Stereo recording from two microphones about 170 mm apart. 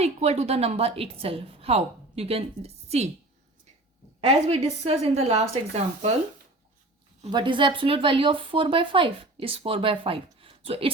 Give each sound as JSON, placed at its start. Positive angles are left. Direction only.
{"t": 0.0, "sound": "speech", "side_deg": -40}
{"t": 4.3, "sound": "speech", "side_deg": -40}
{"t": 7.3, "sound": "speech", "side_deg": -30}